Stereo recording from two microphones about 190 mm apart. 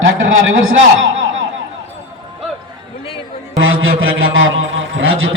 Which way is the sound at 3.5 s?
90° right.